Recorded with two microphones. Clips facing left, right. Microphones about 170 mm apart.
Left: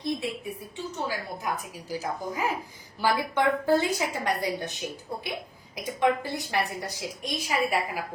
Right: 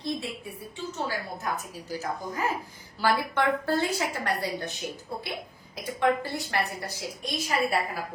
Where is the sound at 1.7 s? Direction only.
15° left (ahead or behind).